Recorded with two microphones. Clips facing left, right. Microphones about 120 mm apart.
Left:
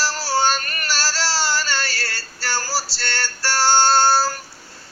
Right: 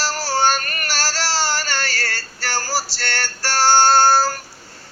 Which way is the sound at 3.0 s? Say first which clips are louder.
Right 1 dB; 45° right (ahead or behind).